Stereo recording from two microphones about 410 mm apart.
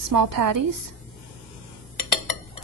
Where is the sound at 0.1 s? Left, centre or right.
Right.